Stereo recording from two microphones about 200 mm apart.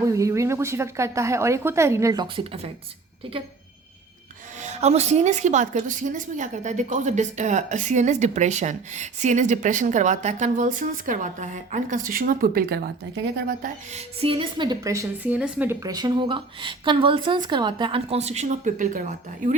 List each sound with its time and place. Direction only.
0.1 s speech: 15° right (ahead or behind)
4.6 s a woman's voice: 35° right (ahead or behind); by 13.7 s 50° right (ahead or behind)
13.9 s a woman's voice: 25° right (ahead or behind)